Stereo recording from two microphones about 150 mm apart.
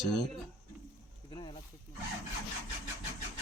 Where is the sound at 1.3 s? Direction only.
30° left (ahead or behind).